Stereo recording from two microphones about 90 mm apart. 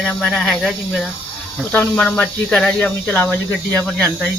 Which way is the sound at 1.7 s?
15° left (ahead or behind).